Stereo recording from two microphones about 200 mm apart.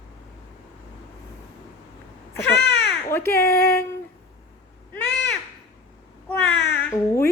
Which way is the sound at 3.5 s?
50° left (ahead or behind).